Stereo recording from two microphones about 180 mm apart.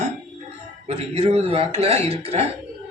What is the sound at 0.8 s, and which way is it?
A man's voice, 35° right (ahead or behind).